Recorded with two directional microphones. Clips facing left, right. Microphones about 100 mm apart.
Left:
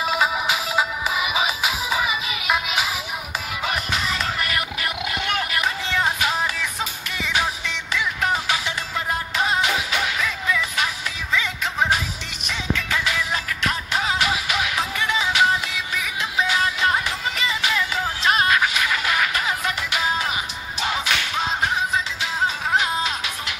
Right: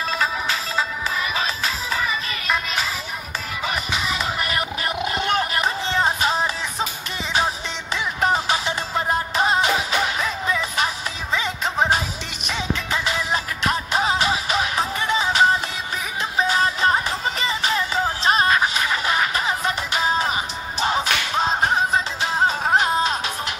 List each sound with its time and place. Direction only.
0.0 s music: 10° left (ahead or behind); by 4.3 s 5° right (ahead or behind)
4.4 s a sound: 30° right (ahead or behind)
11.3 s music: 30° right (ahead or behind)
20.8 s whip: 35° right (ahead or behind)